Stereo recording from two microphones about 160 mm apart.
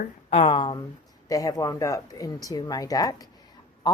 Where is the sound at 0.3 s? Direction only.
40° left (ahead or behind).